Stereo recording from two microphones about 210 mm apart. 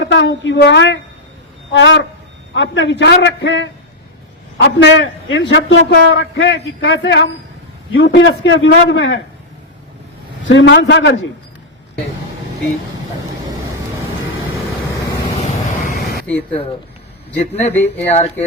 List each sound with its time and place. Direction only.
0.0 s a man's voice: 60° left (ahead or behind)
10.4 s a man's voice: 65° left (ahead or behind)
16.3 s speech: 5° left (ahead or behind)
17.3 s speech: 30° left (ahead or behind)
17.7 s speech: 10° left (ahead or behind)
18.0 s speech: 30° left (ahead or behind)